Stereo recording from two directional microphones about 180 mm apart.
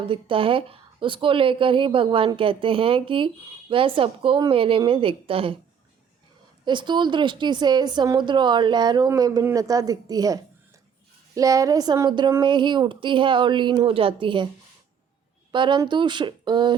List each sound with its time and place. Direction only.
0.1 s a woman's voice: 30° right (ahead or behind)
6.7 s a woman's voice: 25° right (ahead or behind)
15.5 s a woman's voice: 25° right (ahead or behind)